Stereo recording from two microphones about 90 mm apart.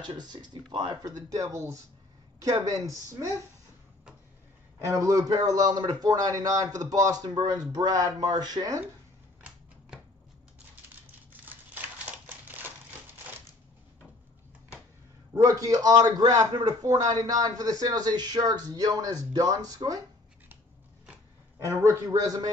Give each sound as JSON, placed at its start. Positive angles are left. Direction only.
{"t": 0.0, "sound": "a man's voice", "side_deg": -55}
{"t": 4.7, "sound": "a man's voice", "side_deg": -35}
{"t": 7.2, "sound": "a man's voice", "side_deg": -55}
{"t": 15.3, "sound": "a man's voice", "side_deg": -35}
{"t": 21.6, "sound": "a man's voice", "side_deg": -40}